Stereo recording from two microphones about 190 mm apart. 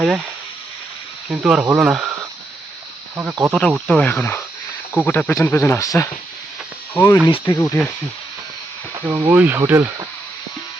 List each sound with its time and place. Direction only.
1.3 s speech: 5° right (ahead or behind)
3.2 s speech: 10° right (ahead or behind)
3.5 s speech: centre (ahead or behind)
7.3 s speech: 20° left (ahead or behind)
7.6 s speech: 10° left (ahead or behind)
9.0 s speech: 20° right (ahead or behind)
9.3 s speech: 10° right (ahead or behind)